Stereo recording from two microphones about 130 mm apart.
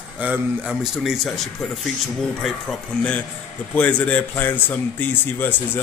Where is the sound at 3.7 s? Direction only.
10° left (ahead or behind).